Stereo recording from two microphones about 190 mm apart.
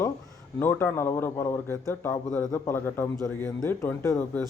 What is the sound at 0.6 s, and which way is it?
A man's voice, 10° left (ahead or behind).